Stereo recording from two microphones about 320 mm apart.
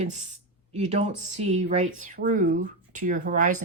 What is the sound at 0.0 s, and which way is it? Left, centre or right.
Speech, right.